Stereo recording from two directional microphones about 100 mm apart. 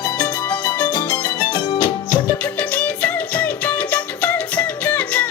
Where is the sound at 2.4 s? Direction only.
15° left (ahead or behind).